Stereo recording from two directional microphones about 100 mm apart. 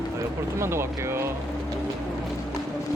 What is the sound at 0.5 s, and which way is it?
Speech, 25° right (ahead or behind).